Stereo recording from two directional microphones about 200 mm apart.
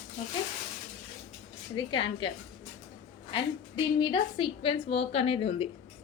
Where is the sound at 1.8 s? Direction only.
25° left (ahead or behind).